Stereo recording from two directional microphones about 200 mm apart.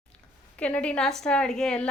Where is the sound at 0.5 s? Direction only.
5° left (ahead or behind).